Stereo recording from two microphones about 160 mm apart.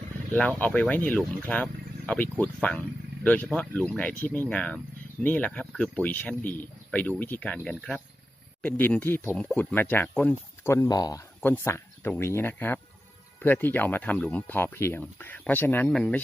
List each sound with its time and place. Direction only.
0.3 s speech: 10° left (ahead or behind)
11.3 s speech: 10° left (ahead or behind)